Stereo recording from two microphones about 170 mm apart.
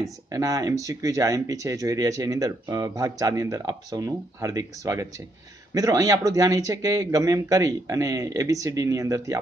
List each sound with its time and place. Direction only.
0.3 s speech: 20° right (ahead or behind)